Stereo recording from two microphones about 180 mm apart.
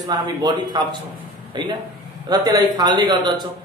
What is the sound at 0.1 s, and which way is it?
A man's voice, 25° right (ahead or behind).